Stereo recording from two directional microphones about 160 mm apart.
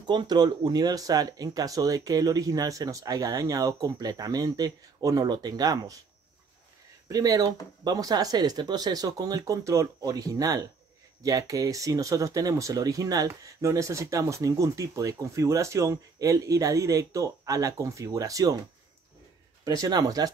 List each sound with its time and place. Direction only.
0.0 s speech: 25° right (ahead or behind)
7.1 s speech: 20° right (ahead or behind)
19.6 s speech: 20° right (ahead or behind)